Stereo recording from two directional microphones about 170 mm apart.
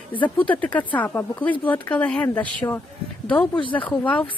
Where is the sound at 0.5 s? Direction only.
10° left (ahead or behind).